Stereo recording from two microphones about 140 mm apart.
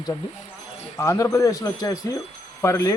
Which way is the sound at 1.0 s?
25° left (ahead or behind).